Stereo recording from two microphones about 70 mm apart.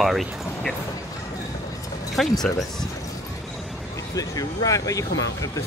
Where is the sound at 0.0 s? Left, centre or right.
Centre.